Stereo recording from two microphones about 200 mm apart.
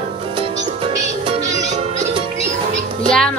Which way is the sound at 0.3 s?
30° right (ahead or behind).